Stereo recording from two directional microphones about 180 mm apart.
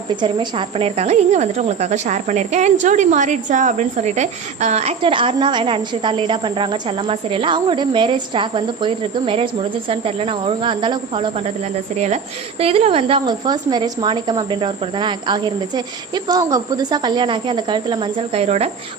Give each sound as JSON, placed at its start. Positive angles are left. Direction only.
{"t": 0.2, "sound": "a woman's voice", "side_deg": -30}
{"t": 11.9, "sound": "speech", "side_deg": -40}